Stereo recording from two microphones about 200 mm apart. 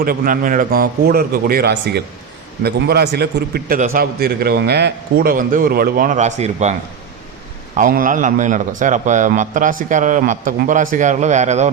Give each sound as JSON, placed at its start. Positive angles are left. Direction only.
{"t": 0.0, "sound": "a man's voice", "side_deg": -45}
{"t": 7.8, "sound": "a man's voice", "side_deg": -40}